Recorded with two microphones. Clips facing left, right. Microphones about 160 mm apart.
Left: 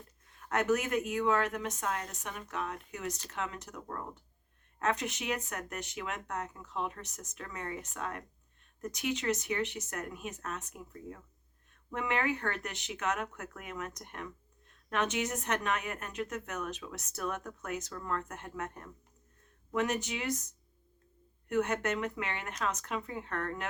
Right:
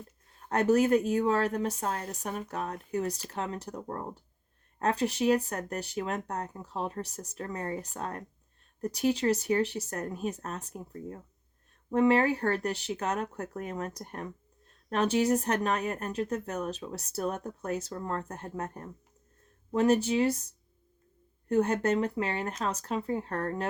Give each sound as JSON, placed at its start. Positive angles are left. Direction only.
{"t": 0.3, "sound": "speech", "side_deg": -35}
{"t": 21.5, "sound": "speech", "side_deg": -30}